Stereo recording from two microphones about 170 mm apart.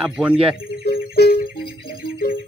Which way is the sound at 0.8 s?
70° left (ahead or behind).